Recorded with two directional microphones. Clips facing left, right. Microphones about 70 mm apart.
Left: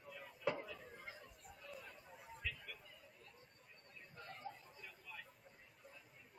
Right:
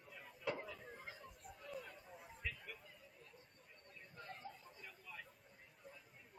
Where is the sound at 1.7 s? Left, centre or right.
Centre.